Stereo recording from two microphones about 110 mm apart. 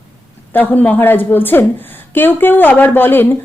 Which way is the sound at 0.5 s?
15° left (ahead or behind).